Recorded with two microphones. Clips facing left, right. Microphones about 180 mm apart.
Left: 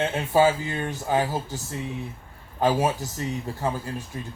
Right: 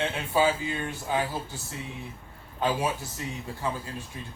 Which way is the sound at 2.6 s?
40° left (ahead or behind).